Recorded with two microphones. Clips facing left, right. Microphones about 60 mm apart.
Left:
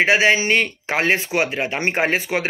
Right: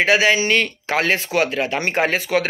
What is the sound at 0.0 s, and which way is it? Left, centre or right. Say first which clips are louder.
Speech: even; left.